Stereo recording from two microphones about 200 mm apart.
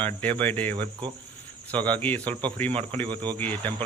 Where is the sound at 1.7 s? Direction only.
10° left (ahead or behind).